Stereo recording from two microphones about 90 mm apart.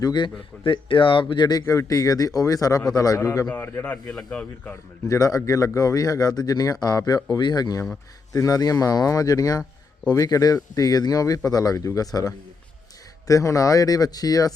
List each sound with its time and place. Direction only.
0.0 s speech: 55° left (ahead or behind)
0.6 s speech: 70° left (ahead or behind); by 1.6 s 50° left (ahead or behind)
1.6 s speech: 35° left (ahead or behind)
3.5 s a man's voice: 20° left (ahead or behind)
4.7 s speech: 35° left (ahead or behind)